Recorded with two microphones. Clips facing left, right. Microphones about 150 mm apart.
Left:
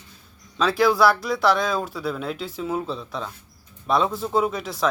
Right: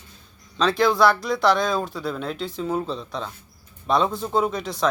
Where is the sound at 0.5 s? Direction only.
5° left (ahead or behind).